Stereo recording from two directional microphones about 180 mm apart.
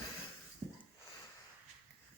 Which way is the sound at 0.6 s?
25° right (ahead or behind).